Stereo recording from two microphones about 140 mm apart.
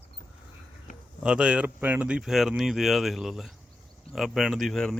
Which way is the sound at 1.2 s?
5° right (ahead or behind).